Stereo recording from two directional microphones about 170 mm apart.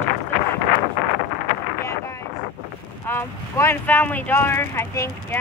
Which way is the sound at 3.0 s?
15° left (ahead or behind).